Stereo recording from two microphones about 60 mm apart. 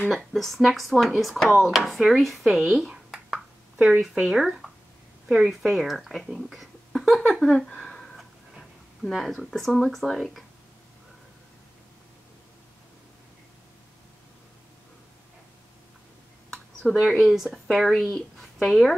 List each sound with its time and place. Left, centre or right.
0.1 s a woman's voice: centre
7.3 s a sound: centre
8.2 s speech: centre
16.9 s speech: centre
17.2 s a woman's voice: centre